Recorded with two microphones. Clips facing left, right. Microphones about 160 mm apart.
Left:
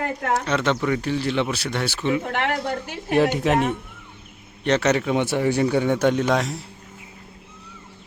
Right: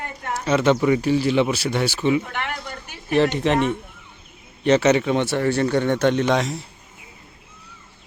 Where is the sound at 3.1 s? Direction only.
10° left (ahead or behind).